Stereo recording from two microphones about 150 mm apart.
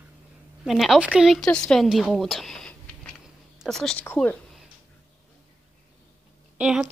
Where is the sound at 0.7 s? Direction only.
Centre (ahead or behind).